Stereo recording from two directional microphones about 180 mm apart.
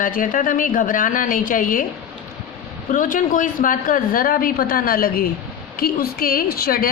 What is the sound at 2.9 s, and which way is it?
A woman's voice, 50° left (ahead or behind).